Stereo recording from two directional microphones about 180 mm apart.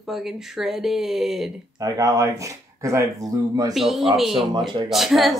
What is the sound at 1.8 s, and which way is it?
Speech, 20° right (ahead or behind).